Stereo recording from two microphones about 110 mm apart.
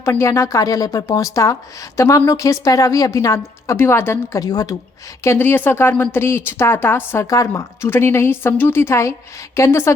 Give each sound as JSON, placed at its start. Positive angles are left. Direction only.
{"t": 0.0, "sound": "a woman's voice", "side_deg": 25}
{"t": 4.4, "sound": "speech", "side_deg": 35}
{"t": 5.2, "sound": "a woman's voice", "side_deg": 20}